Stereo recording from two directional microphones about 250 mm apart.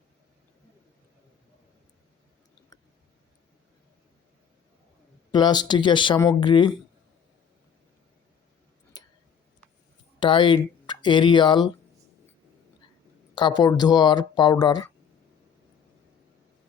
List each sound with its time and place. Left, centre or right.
5.3 s speech: centre
8.9 s a sound: centre
10.2 s speech: centre
13.3 s speech: centre